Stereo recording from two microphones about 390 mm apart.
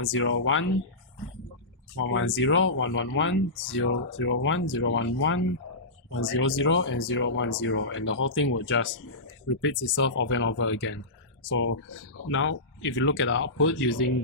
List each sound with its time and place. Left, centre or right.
0.0 s speech: left
2.0 s speech: left